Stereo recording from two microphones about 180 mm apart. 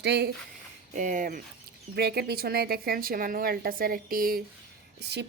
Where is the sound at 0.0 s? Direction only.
70° right (ahead or behind).